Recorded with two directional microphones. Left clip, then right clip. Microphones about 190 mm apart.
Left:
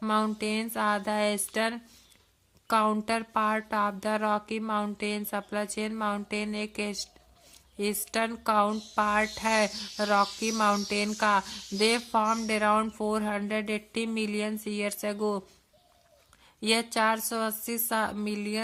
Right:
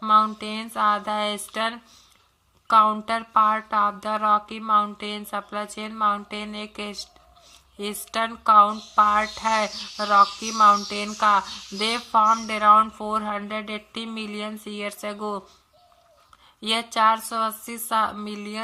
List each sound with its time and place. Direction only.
0.0 s a sound: 30° left (ahead or behind)
0.3 s speech: 30° left (ahead or behind)
16.6 s speech: 25° left (ahead or behind)